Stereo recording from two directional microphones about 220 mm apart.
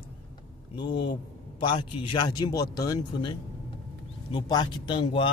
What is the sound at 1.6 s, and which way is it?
Speech, 20° left (ahead or behind).